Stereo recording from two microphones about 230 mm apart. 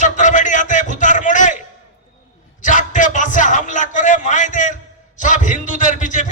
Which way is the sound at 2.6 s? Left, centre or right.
Left.